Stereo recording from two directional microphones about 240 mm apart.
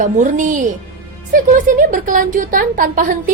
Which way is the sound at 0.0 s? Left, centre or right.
Right.